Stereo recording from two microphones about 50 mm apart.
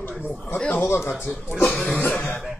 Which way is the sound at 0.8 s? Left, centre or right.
Left.